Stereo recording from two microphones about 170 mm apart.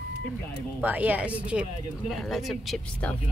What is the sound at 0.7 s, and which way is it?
Speech, 10° right (ahead or behind).